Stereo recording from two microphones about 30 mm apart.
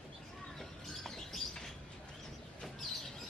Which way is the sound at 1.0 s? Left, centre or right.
Centre.